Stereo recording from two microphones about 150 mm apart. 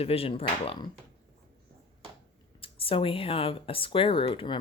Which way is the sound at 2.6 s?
40° left (ahead or behind).